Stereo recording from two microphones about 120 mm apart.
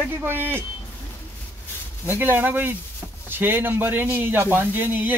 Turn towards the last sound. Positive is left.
turn(degrees=-15)  # may be behind; listen again after turning